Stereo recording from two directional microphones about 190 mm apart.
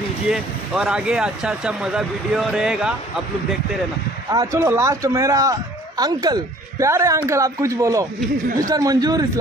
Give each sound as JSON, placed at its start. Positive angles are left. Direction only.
{"t": 0.3, "sound": "speech", "side_deg": -5}
{"t": 4.3, "sound": "a man's voice", "side_deg": -15}